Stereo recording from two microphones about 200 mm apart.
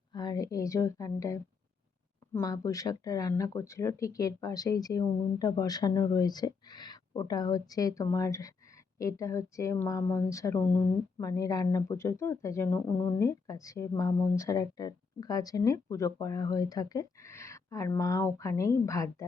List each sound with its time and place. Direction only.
0.1 s speech: 20° left (ahead or behind)